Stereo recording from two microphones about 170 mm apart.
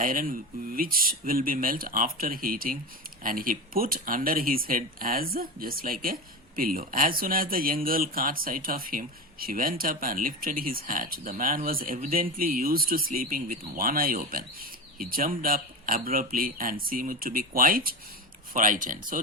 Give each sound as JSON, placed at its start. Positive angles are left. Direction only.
{"t": 0.0, "sound": "speech", "side_deg": -55}